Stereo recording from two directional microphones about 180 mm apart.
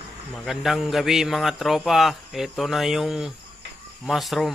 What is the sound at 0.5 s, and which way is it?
Speech, centre (ahead or behind).